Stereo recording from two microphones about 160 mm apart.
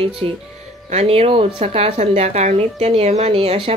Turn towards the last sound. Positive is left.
turn(degrees=-40)  # may be behind; listen again after turning